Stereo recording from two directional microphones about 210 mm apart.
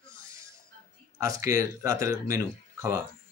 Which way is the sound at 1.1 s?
15° right (ahead or behind).